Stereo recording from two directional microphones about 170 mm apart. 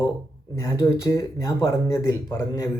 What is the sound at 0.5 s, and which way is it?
A man's voice, 15° left (ahead or behind).